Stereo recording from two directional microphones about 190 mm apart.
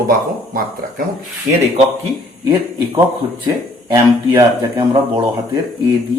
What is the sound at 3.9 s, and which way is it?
Speech, 15° right (ahead or behind).